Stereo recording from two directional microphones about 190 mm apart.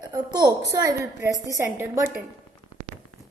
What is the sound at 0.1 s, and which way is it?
A woman's voice, 20° right (ahead or behind).